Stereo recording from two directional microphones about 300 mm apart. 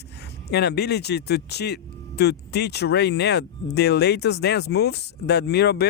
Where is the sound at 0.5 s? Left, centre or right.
Left.